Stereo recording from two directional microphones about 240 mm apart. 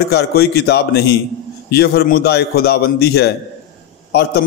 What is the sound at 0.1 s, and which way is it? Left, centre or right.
A man's voice, left.